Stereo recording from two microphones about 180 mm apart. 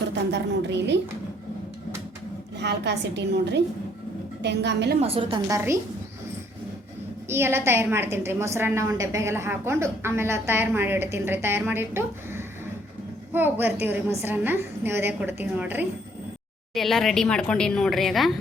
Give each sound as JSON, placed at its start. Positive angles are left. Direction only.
{"t": 0.3, "sound": "a woman's voice", "side_deg": -70}
{"t": 2.6, "sound": "a woman's voice", "side_deg": -70}
{"t": 4.9, "sound": "a woman's voice", "side_deg": -35}
{"t": 5.5, "sound": "a woman's voice", "side_deg": -15}
{"t": 7.3, "sound": "a woman's voice", "side_deg": -15}
{"t": 16.7, "sound": "a woman's voice", "side_deg": 0}